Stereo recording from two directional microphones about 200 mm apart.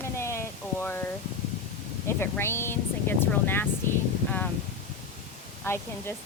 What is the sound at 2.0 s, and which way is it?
Speech, 10° left (ahead or behind).